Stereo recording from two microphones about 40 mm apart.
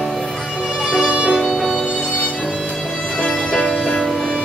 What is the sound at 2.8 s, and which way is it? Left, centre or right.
Music, centre.